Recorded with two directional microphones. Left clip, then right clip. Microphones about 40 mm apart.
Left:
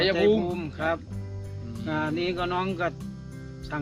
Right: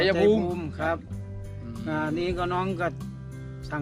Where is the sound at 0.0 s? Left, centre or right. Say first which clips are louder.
Right 1 dB; right.